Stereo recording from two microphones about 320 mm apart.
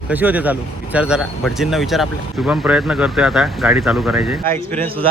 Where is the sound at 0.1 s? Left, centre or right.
Centre.